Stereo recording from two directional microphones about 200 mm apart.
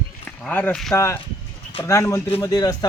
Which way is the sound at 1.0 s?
15° left (ahead or behind).